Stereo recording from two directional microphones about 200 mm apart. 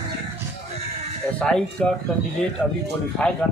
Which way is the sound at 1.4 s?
5° left (ahead or behind).